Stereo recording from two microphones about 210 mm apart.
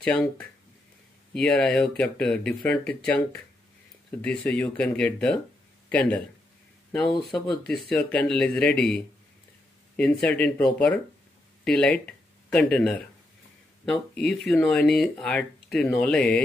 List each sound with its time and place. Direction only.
0.0 s a man's voice: 5° left (ahead or behind)